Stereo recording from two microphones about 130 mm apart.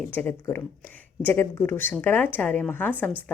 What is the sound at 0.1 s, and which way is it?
A woman's voice, 15° left (ahead or behind).